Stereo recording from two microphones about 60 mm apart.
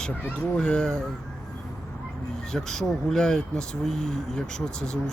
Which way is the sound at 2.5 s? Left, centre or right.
Centre.